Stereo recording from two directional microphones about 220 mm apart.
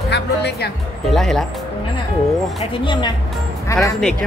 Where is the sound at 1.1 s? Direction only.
Centre (ahead or behind).